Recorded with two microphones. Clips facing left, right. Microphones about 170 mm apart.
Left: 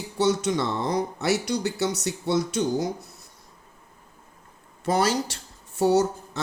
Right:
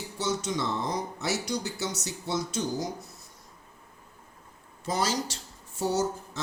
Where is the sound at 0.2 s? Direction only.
65° left (ahead or behind).